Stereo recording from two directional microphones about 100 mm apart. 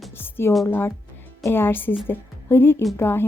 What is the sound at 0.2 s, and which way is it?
Music, 25° left (ahead or behind).